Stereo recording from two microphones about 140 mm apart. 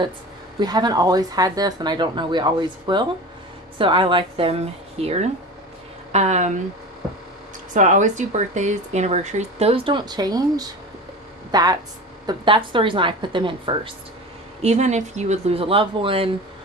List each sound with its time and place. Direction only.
0.6 s a woman's voice: 30° right (ahead or behind); by 6.5 s 55° right (ahead or behind)
7.7 s a woman's voice: 60° right (ahead or behind); by 13.9 s 40° right (ahead or behind)
14.6 s speech: 50° right (ahead or behind)